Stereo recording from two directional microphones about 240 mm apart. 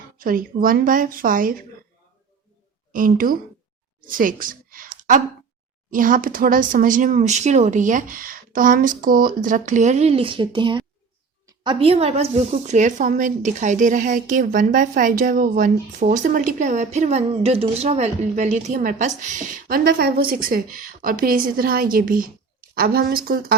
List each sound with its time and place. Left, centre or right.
0.2 s a woman's voice: right
2.9 s a woman's voice: right
5.9 s a woman's voice: right